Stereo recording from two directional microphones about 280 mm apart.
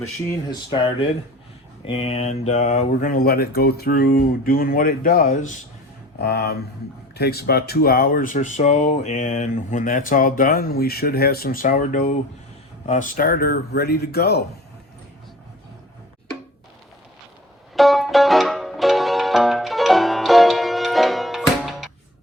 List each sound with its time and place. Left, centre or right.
0.3 s speech: centre; by 14.4 s left
17.7 s music: centre